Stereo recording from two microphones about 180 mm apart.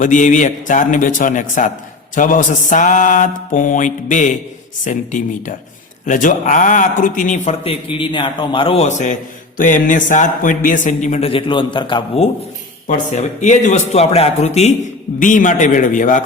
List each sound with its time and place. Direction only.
0.0 s speech: 45° left (ahead or behind)
12.9 s a man's voice: 40° left (ahead or behind)